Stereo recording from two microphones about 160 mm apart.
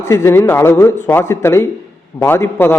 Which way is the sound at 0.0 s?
15° left (ahead or behind).